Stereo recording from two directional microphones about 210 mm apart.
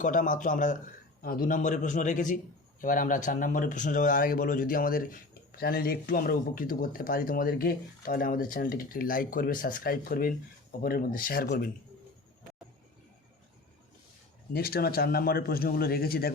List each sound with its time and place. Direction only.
0.0 s a man's voice: 40° left (ahead or behind)
14.5 s speech: 45° left (ahead or behind)